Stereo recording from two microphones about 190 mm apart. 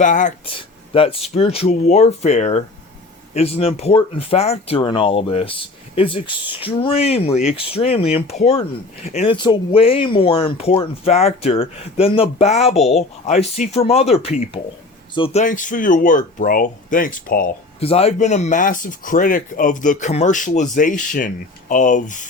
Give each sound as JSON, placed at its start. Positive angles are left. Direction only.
{"t": 0.0, "sound": "speech", "side_deg": 40}
{"t": 0.9, "sound": "speech", "side_deg": 30}
{"t": 17.7, "sound": "speech", "side_deg": 30}